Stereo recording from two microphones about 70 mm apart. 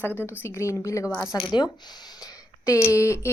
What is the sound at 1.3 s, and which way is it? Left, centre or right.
Speech, left.